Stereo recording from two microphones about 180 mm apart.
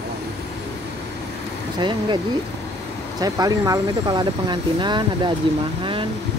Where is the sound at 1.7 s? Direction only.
25° right (ahead or behind).